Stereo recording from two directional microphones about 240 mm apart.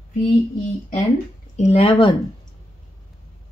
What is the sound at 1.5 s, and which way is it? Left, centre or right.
Speech, left.